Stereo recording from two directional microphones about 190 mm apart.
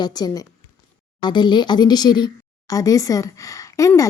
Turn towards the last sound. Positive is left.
turn(degrees=15)  # may be behind; listen again after turning